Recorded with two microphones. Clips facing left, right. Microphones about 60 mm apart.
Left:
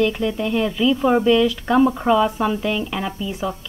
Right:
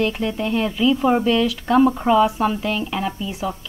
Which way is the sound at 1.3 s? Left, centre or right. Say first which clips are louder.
Left 1 dB; centre.